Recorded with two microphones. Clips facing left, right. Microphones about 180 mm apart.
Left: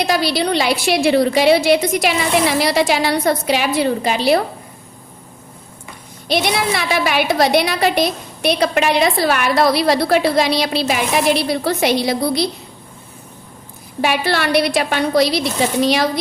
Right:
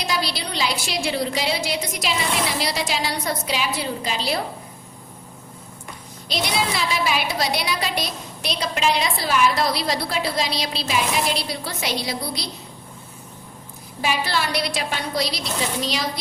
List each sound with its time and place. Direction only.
0.0 s a woman's voice: 60° left (ahead or behind)
6.2 s a woman's voice: 60° left (ahead or behind)
14.0 s a woman's voice: 65° left (ahead or behind)